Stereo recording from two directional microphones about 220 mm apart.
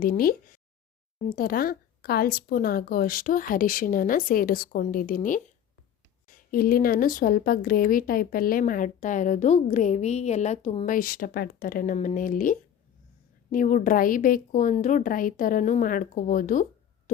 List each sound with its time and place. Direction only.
0.0 s speech: 40° left (ahead or behind)